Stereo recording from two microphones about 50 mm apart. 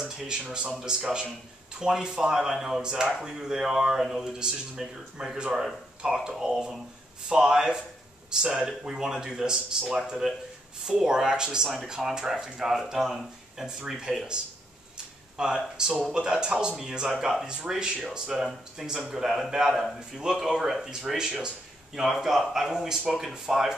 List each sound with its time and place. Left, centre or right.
0.0 s a sound: centre
0.4 s speech: centre
0.7 s speech: centre; by 18.2 s right
18.2 s speech: centre